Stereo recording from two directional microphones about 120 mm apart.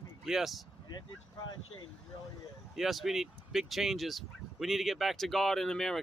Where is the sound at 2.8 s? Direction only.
Centre (ahead or behind).